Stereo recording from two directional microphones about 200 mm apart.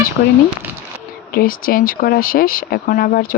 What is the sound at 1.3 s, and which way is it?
Speech, 45° left (ahead or behind).